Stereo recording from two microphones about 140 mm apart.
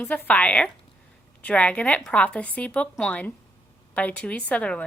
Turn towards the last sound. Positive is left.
turn(degrees=10)  # may be behind; listen again after turning